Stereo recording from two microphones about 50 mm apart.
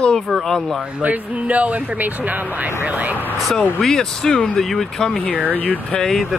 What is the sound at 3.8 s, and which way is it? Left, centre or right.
Speech, centre.